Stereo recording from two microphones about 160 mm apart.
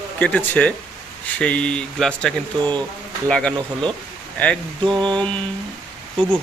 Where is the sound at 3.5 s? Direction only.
30° right (ahead or behind).